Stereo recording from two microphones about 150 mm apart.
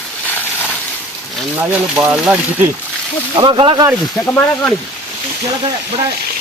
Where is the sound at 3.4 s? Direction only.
35° right (ahead or behind).